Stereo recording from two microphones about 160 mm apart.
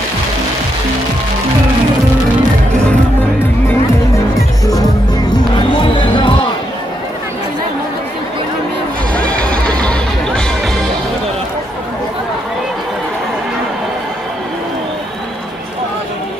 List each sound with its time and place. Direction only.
5.8 s music: 30° left (ahead or behind)
9.1 s music: 10° left (ahead or behind)